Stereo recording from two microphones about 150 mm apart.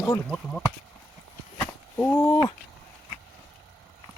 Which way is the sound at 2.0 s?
15° left (ahead or behind).